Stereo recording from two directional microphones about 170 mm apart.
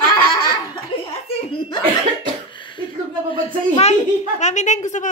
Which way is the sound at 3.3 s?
35° left (ahead or behind).